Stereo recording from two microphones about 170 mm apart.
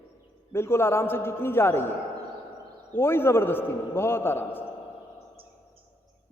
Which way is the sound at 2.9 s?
15° left (ahead or behind).